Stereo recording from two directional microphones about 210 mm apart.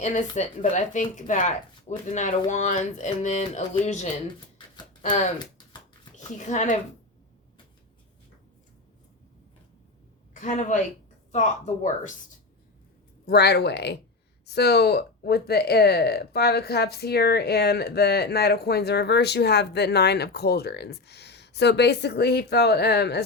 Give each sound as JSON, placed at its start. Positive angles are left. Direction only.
{"t": 0.0, "sound": "speech", "side_deg": 35}
{"t": 6.1, "sound": "speech", "side_deg": 35}
{"t": 10.4, "sound": "speech", "side_deg": 35}
{"t": 13.2, "sound": "speech", "side_deg": 50}